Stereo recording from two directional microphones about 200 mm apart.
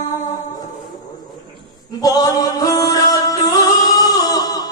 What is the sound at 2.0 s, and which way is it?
Music, 20° left (ahead or behind).